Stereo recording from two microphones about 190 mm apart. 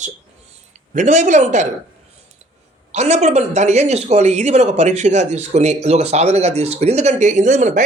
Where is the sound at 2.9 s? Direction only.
35° right (ahead or behind).